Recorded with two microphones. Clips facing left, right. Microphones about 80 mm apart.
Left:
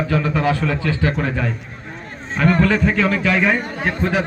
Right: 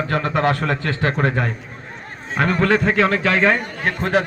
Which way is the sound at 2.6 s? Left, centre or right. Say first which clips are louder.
Right 1 dB; right.